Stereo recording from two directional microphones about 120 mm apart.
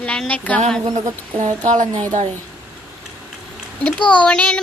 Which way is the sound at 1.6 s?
90° right.